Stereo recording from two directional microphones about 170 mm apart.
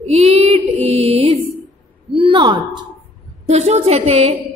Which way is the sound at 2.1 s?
30° right (ahead or behind).